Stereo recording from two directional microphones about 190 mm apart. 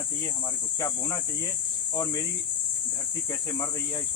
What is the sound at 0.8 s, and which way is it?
Speech, 15° left (ahead or behind).